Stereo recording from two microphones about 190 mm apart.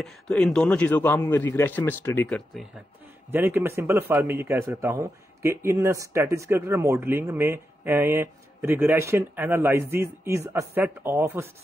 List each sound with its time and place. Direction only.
0.0 s a man's voice: 5° left (ahead or behind)
3.3 s a man's voice: 10° right (ahead or behind)